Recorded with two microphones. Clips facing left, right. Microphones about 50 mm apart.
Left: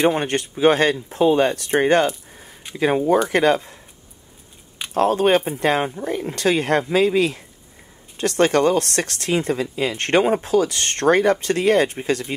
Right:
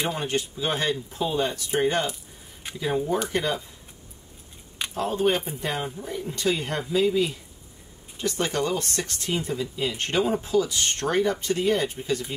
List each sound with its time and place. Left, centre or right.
0.0 s speech: left
4.9 s speech: left